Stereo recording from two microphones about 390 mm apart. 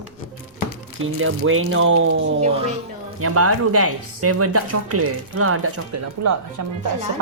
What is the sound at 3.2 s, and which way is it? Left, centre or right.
Speech, right.